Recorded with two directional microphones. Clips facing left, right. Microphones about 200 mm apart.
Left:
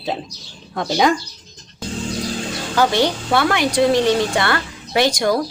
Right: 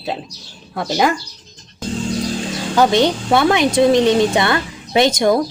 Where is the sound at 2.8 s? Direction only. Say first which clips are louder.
Right 3 dB; 20° right (ahead or behind).